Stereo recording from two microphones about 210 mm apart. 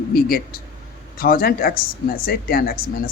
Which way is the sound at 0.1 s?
45° left (ahead or behind).